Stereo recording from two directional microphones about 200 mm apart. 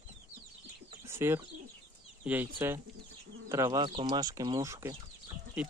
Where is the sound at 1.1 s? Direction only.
10° right (ahead or behind).